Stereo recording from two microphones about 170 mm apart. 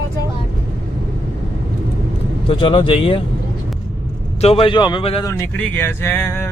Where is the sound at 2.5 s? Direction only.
30° left (ahead or behind).